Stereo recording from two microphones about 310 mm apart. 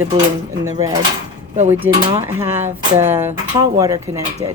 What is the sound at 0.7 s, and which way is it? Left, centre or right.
Speech, centre.